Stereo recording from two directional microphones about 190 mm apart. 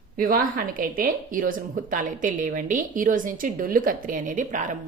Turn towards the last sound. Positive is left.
turn(degrees=-40)  # may be behind; listen again after turning